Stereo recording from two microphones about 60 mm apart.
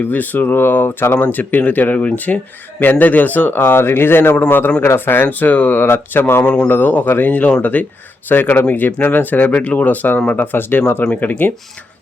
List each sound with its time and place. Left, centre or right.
0.0 s speech: left
3.6 s speech: left
6.4 s speech: centre
6.7 s speech: left